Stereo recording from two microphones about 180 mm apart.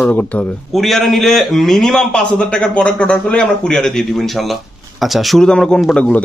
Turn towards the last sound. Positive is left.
turn(degrees=5)  # may be behind; listen again after turning